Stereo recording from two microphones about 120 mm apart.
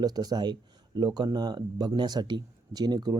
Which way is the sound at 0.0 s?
35° right (ahead or behind).